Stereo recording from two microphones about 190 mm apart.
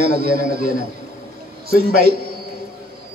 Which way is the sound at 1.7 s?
55° right (ahead or behind).